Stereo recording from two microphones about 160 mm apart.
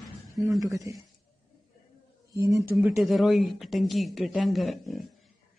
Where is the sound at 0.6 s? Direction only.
20° right (ahead or behind).